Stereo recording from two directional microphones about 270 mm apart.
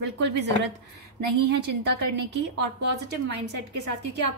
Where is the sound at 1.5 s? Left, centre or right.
Right.